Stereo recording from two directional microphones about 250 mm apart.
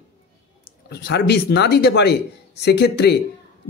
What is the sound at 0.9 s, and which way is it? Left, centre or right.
A man's voice, left.